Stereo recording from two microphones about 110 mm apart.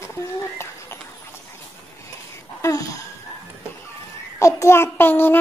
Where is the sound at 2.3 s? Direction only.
30° left (ahead or behind).